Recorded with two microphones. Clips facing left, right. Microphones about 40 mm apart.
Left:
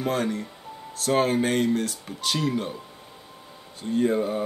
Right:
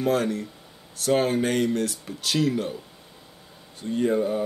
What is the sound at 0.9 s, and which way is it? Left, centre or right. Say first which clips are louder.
Speech: even; left.